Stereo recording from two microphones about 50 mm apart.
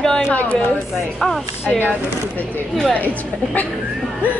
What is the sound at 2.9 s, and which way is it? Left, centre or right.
Speech, left.